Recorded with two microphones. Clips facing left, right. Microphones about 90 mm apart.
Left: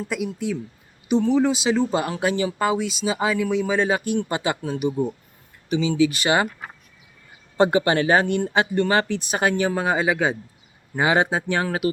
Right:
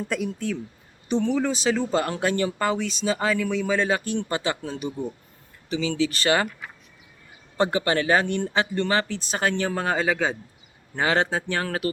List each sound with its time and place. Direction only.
0.0 s speech: 5° left (ahead or behind)
7.5 s speech: 20° left (ahead or behind)